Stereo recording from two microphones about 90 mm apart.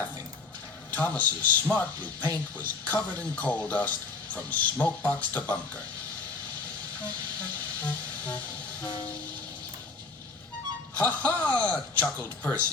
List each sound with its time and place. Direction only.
0.9 s speech: 20° left (ahead or behind)
7.8 s music: 20° left (ahead or behind)
11.0 s a man's voice: 20° left (ahead or behind)